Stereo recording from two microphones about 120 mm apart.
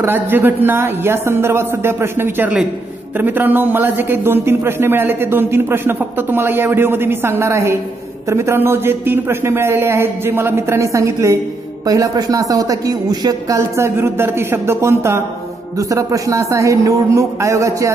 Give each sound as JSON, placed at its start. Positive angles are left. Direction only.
{"t": 0.0, "sound": "a man's voice", "side_deg": -15}